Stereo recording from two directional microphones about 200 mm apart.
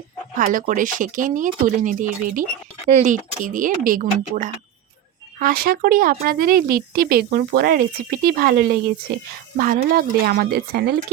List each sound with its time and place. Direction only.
0.3 s speech: 40° right (ahead or behind)